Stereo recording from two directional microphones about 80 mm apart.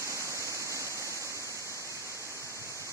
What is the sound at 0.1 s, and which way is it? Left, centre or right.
Waterfall, right.